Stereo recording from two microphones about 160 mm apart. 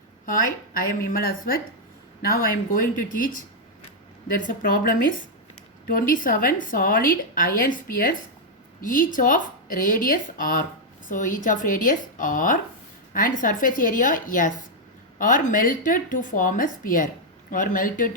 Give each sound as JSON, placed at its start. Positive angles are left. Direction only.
{"t": 0.3, "sound": "a woman's voice", "side_deg": 60}
{"t": 4.4, "sound": "a woman's voice", "side_deg": 60}